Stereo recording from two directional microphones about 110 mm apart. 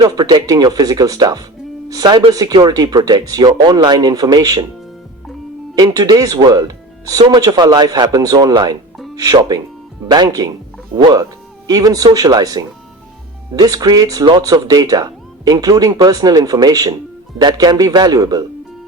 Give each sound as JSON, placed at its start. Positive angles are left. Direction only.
{"t": 0.0, "sound": "speech", "side_deg": -35}
{"t": 5.7, "sound": "speech", "side_deg": -35}